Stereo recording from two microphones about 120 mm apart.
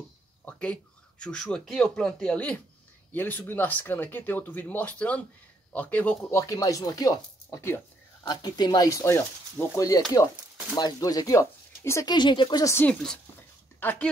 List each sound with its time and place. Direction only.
0.5 s a sound: 10° left (ahead or behind)
1.2 s speech: 5° left (ahead or behind)
6.5 s speech: 30° left (ahead or behind)
8.2 s speech: 35° left (ahead or behind)
12.1 s speech: 40° left (ahead or behind)
12.6 s speech: 20° left (ahead or behind)